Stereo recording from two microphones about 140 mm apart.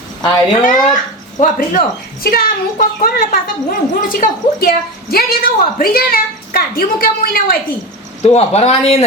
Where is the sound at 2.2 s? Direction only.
90° left.